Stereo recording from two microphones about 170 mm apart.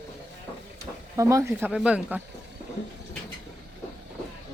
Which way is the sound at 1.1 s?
20° right (ahead or behind).